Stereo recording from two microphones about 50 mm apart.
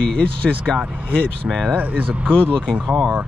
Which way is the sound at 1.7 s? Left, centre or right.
Right.